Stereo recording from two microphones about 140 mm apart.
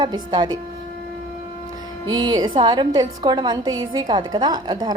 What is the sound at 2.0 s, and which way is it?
A woman's voice, 30° right (ahead or behind).